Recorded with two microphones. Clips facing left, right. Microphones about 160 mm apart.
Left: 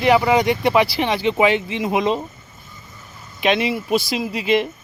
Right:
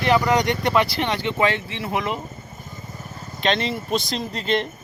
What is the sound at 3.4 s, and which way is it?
Speech, 10° left (ahead or behind).